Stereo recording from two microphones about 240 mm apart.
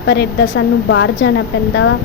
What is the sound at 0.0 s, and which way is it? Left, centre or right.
A woman's voice, left.